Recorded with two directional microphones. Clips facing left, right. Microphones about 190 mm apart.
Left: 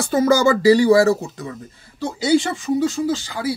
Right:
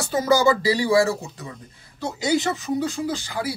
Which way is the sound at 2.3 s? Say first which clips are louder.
Left 5 dB; 25° left (ahead or behind).